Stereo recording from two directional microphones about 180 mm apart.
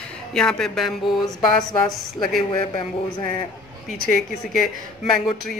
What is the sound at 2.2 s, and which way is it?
Speech, 25° left (ahead or behind).